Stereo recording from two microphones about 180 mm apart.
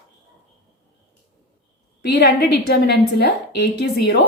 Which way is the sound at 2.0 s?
65° left (ahead or behind).